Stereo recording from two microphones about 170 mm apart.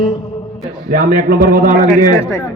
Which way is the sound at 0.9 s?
60° right (ahead or behind).